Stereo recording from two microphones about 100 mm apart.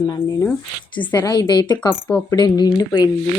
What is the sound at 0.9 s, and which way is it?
Speech, 55° left (ahead or behind).